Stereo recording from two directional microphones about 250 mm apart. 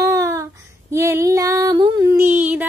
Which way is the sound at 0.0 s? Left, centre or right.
Centre.